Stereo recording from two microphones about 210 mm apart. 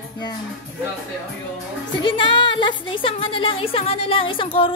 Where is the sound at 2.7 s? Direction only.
65° left (ahead or behind).